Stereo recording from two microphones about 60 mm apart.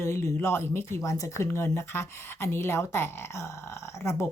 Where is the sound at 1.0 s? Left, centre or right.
Left.